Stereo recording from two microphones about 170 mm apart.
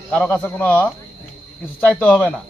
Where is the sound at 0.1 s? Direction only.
5° left (ahead or behind).